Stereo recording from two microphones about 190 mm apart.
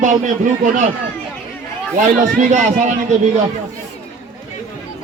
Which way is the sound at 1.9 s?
40° right (ahead or behind).